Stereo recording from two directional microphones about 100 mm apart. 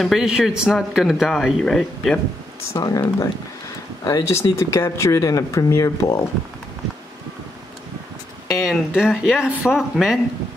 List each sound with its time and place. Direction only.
0.0 s speech: 5° right (ahead or behind)
2.8 s speech: 35° left (ahead or behind)
8.5 s speech: 5° right (ahead or behind)